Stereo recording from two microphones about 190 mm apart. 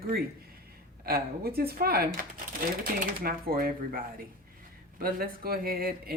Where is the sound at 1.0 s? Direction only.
55° right (ahead or behind).